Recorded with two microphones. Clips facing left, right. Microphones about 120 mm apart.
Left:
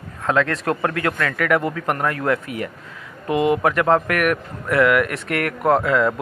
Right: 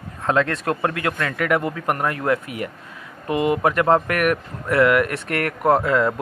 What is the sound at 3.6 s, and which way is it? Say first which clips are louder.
Speech: even; 25° right (ahead or behind).